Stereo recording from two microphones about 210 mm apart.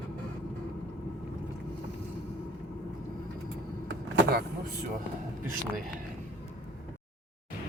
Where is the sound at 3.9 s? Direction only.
60° right (ahead or behind).